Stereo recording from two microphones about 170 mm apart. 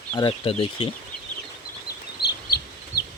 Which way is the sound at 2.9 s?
65° left (ahead or behind).